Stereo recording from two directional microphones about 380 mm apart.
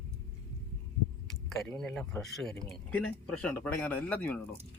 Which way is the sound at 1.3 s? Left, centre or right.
Centre.